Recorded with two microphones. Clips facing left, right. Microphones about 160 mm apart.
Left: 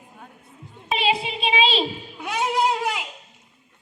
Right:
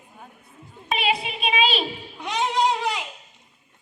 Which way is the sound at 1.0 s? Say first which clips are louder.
Left 2 dB; 30° left (ahead or behind).